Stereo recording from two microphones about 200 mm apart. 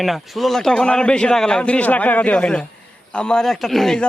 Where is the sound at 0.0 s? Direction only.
Centre (ahead or behind).